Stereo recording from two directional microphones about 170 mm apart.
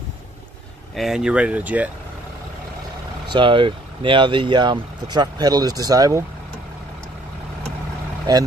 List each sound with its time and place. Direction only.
0.9 s speech: centre (ahead or behind)
3.3 s speech: 30° right (ahead or behind)